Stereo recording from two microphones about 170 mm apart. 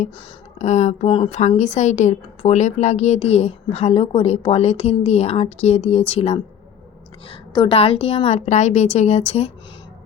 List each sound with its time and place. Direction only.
0.6 s a woman's voice: 45° left (ahead or behind)